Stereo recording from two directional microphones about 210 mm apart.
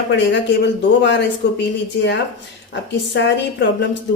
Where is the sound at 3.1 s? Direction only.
55° left (ahead or behind).